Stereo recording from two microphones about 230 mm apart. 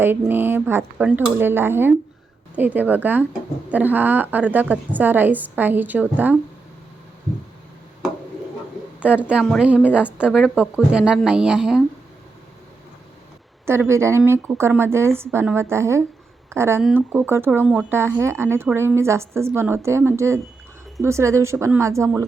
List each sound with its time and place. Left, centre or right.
0.0 s speech: centre
9.0 s a woman's voice: centre
13.7 s speech: centre